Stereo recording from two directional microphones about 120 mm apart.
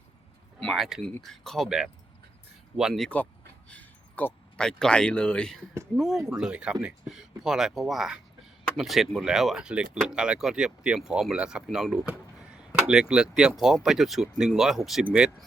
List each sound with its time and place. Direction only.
0.6 s speech: centre (ahead or behind)
3.7 s speech: 10° left (ahead or behind); by 15.4 s 5° right (ahead or behind)